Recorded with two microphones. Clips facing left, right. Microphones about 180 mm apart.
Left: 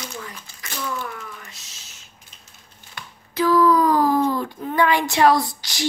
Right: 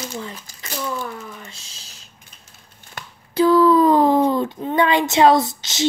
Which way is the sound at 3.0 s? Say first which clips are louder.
Right 3 dB; 45° right (ahead or behind).